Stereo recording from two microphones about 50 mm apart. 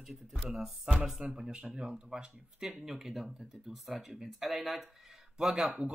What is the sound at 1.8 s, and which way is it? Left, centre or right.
Speech, centre.